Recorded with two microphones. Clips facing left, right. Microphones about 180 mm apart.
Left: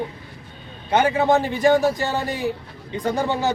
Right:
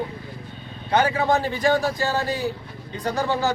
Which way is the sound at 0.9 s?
20° left (ahead or behind).